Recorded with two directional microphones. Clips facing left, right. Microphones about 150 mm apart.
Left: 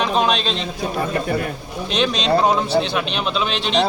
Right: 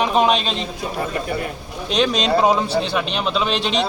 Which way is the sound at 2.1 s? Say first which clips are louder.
Left 1 dB; centre (ahead or behind).